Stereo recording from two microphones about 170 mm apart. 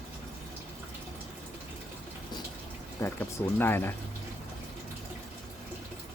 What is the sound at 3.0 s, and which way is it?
Speech, 20° left (ahead or behind).